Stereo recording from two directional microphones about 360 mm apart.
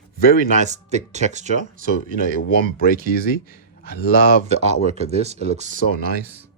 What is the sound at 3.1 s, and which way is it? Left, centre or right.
Speech, left.